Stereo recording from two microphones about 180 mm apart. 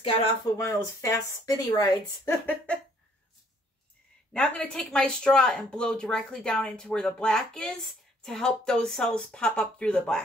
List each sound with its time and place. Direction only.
0.6 s speech: 15° left (ahead or behind)
2.4 s speech: 5° left (ahead or behind)
4.3 s speech: 5° left (ahead or behind)